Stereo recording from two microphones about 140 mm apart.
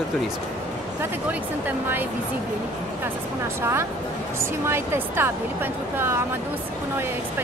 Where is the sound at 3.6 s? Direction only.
20° right (ahead or behind).